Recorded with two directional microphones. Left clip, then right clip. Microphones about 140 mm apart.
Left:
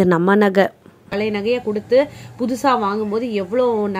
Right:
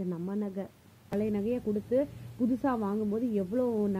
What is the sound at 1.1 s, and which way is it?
A woman's voice, 30° right (ahead or behind).